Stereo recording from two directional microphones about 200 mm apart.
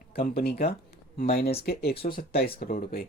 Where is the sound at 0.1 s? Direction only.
50° left (ahead or behind).